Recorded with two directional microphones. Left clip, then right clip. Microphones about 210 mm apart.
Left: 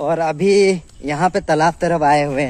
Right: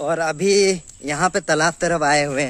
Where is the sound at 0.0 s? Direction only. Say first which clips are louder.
Left 3 dB; 10° right (ahead or behind).